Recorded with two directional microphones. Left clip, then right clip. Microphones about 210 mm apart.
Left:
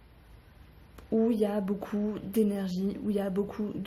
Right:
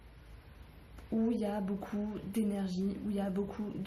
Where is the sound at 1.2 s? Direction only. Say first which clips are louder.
Left 6 dB; 50° left (ahead or behind).